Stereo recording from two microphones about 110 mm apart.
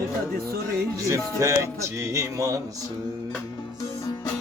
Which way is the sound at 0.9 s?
30° right (ahead or behind).